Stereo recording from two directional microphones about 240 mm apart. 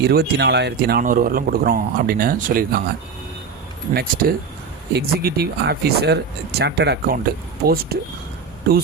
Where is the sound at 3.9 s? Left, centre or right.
Right.